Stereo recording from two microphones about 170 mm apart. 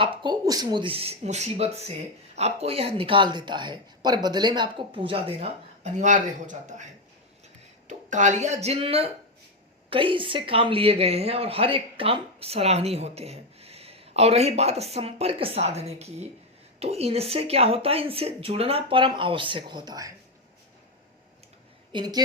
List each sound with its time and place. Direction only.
0.0 s speech: 30° right (ahead or behind)
21.9 s a woman's voice: 25° right (ahead or behind)